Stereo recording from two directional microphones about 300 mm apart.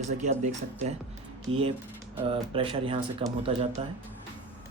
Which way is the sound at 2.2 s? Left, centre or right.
Centre.